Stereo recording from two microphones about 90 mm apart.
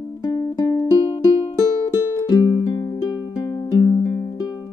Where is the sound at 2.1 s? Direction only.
40° left (ahead or behind).